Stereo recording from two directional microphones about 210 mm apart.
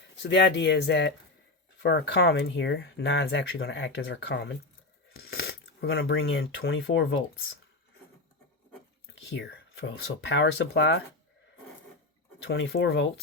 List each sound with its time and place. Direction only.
0.2 s speech: 55° left (ahead or behind)
5.3 s a sound: 50° left (ahead or behind)
5.9 s speech: 65° left (ahead or behind)
9.3 s speech: 55° left (ahead or behind)
12.5 s speech: 60° left (ahead or behind)